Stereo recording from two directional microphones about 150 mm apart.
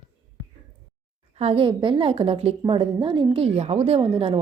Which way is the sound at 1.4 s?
40° right (ahead or behind).